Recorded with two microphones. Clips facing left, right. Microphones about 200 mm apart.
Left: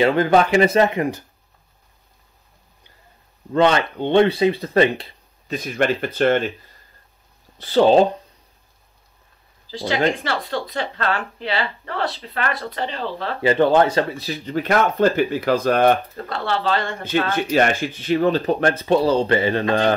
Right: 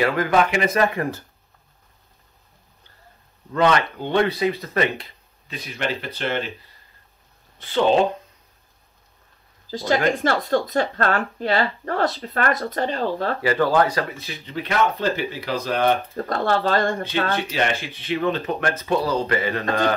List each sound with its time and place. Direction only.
0.0 s speech: 25° left (ahead or behind)
3.5 s speech: 25° left (ahead or behind)
5.5 s speech: 45° left (ahead or behind)
7.5 s speech: 35° left (ahead or behind)
9.7 s speech: 45° right (ahead or behind)
13.4 s speech: 25° left (ahead or behind); by 15.9 s 50° left (ahead or behind)
16.3 s speech: 45° right (ahead or behind)
17.0 s speech: 45° left (ahead or behind); by 19.6 s 30° left (ahead or behind)